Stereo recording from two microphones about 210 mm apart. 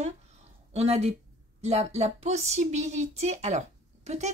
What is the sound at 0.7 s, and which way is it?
Speech, 30° right (ahead or behind).